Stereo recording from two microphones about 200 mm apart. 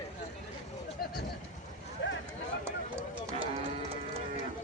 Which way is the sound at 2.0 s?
60° left (ahead or behind).